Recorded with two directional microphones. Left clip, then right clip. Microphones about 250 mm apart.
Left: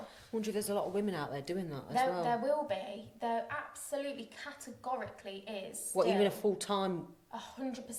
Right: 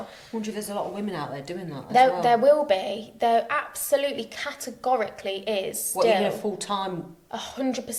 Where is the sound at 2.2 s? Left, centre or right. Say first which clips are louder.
Right 14 dB; right.